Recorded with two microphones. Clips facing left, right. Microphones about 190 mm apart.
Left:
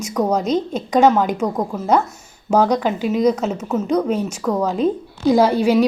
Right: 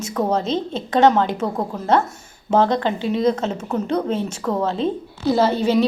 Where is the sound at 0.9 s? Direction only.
10° left (ahead or behind).